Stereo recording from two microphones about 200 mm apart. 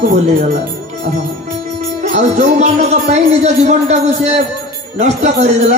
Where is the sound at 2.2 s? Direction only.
35° right (ahead or behind).